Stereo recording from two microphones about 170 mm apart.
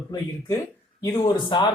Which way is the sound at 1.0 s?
20° left (ahead or behind).